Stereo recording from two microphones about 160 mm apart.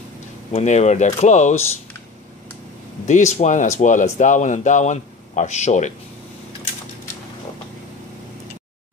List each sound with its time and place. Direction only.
0.5 s speech: 45° left (ahead or behind)
3.1 s speech: 45° left (ahead or behind)